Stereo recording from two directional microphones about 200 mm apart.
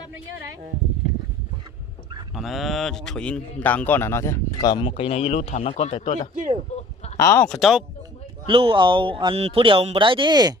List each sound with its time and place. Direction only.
2.3 s speech: centre (ahead or behind); by 6.2 s 30° left (ahead or behind)
6.3 s speech: 40° right (ahead or behind)
7.2 s speech: 15° left (ahead or behind)
8.5 s speech: 25° right (ahead or behind)